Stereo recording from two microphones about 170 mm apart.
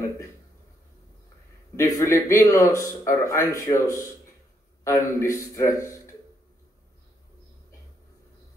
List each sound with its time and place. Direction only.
1.8 s a man's voice: 20° left (ahead or behind)